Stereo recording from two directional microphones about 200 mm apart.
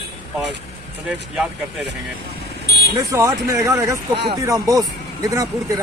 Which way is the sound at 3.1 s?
15° right (ahead or behind).